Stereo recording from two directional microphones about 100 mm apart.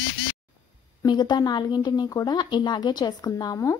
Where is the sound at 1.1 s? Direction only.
45° left (ahead or behind).